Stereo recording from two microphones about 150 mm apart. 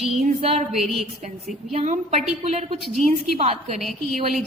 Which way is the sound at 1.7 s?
50° right (ahead or behind).